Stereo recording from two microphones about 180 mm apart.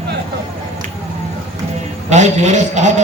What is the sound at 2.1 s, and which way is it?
Speech, 40° right (ahead or behind).